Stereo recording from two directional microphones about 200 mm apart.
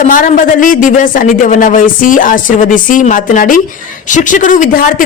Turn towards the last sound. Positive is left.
turn(degrees=40)  # may be behind; listen again after turning